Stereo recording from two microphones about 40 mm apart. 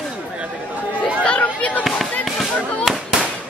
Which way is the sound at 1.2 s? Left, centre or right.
Left.